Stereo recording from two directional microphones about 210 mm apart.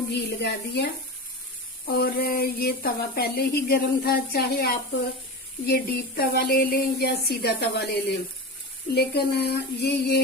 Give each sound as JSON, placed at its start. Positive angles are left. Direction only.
{"t": 0.1, "sound": "speech", "side_deg": 50}
{"t": 1.9, "sound": "speech", "side_deg": 45}
{"t": 9.0, "sound": "speech", "side_deg": 50}